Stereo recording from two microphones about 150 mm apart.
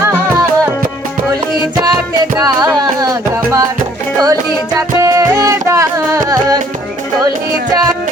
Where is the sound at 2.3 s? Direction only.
25° right (ahead or behind).